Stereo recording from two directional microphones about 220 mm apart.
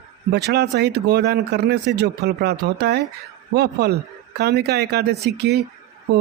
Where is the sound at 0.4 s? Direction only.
50° right (ahead or behind).